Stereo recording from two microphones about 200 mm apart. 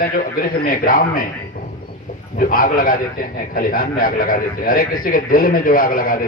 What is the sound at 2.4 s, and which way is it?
A man's voice, 45° left (ahead or behind).